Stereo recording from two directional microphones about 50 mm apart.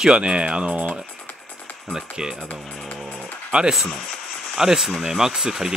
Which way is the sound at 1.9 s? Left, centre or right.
Centre.